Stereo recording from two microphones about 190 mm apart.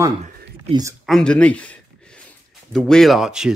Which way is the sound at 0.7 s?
20° right (ahead or behind).